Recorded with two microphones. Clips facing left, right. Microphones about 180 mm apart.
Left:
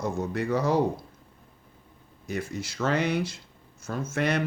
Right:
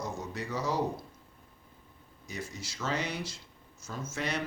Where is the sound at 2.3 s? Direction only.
55° left (ahead or behind).